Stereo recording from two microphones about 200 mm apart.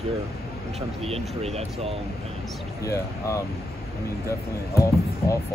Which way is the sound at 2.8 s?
15° left (ahead or behind).